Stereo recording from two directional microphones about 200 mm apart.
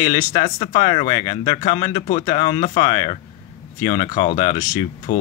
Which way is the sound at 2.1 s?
40° left (ahead or behind).